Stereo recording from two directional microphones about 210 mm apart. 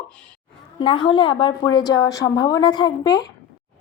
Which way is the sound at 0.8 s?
25° left (ahead or behind).